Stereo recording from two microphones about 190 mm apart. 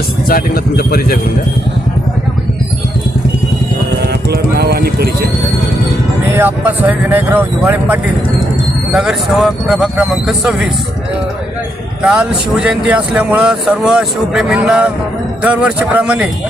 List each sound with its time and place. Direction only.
0.3 s speech: 55° left (ahead or behind)
4.0 s music: 55° right (ahead or behind)
6.3 s speech: 10° right (ahead or behind)
12.0 s speech: 5° right (ahead or behind)